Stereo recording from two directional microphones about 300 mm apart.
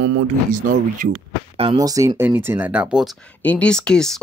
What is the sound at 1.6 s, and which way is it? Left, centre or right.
Speech, centre.